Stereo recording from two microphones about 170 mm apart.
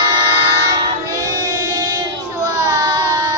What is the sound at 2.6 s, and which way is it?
Child singing, 20° right (ahead or behind).